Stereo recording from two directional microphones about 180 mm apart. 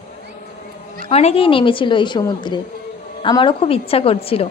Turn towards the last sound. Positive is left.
turn(degrees=30)  # may be behind; listen again after turning